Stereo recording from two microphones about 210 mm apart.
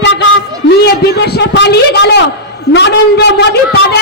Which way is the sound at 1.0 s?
50° left (ahead or behind).